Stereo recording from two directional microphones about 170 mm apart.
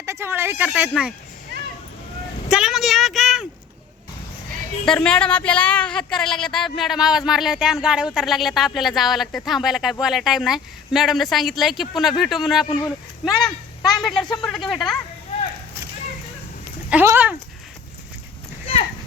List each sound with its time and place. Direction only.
0.0 s speech: 15° right (ahead or behind)
2.5 s a sound: 5° right (ahead or behind)
4.9 s a woman's voice: 5° left (ahead or behind)
12.6 s speech: 30° left (ahead or behind)
13.2 s a woman's voice: centre (ahead or behind)
16.9 s speech: 10° right (ahead or behind)
18.6 s clip-clop: 35° left (ahead or behind)